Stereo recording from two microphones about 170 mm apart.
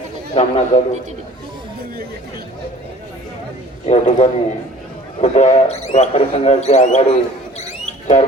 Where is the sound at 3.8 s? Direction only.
40° left (ahead or behind).